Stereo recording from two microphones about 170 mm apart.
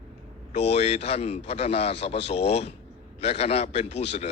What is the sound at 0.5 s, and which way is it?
Speech, 40° left (ahead or behind).